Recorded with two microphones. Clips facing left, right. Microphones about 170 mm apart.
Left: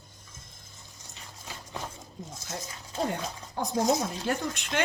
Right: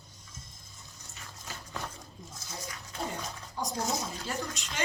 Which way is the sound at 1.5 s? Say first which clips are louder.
Left 2 dB; 20° left (ahead or behind).